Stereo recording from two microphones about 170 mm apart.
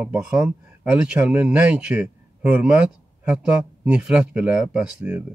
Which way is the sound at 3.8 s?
5° right (ahead or behind).